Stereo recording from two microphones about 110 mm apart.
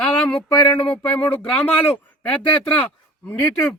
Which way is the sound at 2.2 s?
15° left (ahead or behind).